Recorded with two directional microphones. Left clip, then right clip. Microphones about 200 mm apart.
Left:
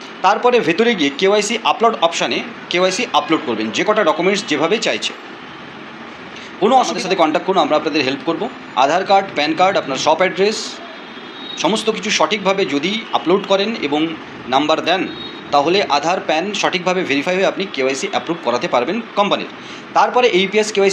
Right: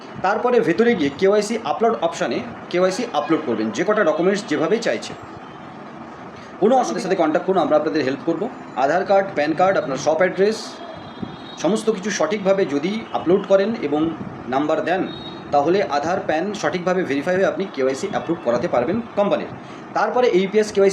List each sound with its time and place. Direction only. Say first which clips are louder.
0.2 s a man's voice: left 4 dB; 15° right (ahead or behind)
6.6 s a man's voice: left 4 dB; 15° right (ahead or behind)